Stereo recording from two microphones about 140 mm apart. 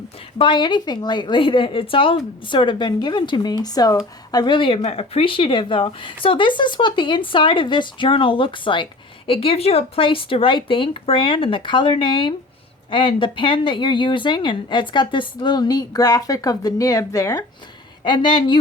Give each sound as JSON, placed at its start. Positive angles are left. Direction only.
{"t": 0.3, "sound": "speech", "side_deg": 35}